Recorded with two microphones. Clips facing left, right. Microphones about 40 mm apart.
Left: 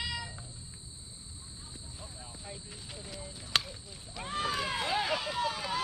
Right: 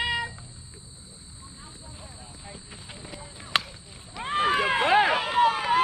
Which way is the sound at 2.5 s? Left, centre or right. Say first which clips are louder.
Right 3 dB; right.